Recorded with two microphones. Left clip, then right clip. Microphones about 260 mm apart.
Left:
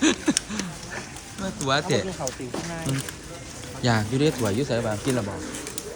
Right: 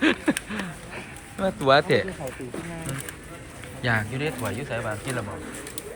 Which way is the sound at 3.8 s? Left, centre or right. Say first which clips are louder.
Left 3 dB; centre.